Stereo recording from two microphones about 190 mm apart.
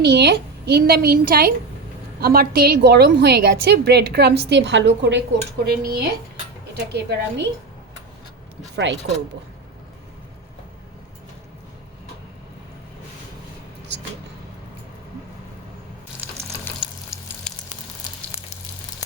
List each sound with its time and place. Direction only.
0.0 s a woman's voice: 60° right (ahead or behind)
5.6 s a woman's voice: 55° right (ahead or behind)
8.7 s speech: 70° right (ahead or behind)
16.7 s frying: 10° left (ahead or behind)
17.5 s a sound: 5° left (ahead or behind)